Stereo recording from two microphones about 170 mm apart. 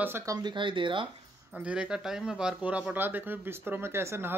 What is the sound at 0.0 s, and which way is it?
Speech, 15° right (ahead or behind).